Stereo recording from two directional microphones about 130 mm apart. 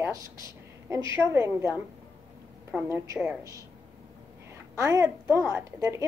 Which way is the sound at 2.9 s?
20° right (ahead or behind).